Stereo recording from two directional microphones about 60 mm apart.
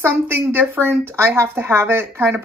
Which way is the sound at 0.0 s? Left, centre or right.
Right.